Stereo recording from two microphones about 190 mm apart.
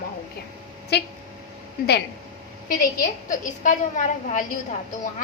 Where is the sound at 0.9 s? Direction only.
60° left (ahead or behind).